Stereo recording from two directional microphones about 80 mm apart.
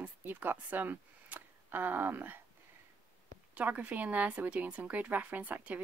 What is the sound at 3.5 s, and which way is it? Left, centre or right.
Speech, centre.